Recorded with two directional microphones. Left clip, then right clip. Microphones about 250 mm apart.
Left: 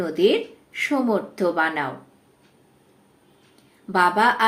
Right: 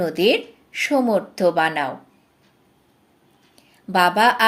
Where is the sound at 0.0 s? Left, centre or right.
Right.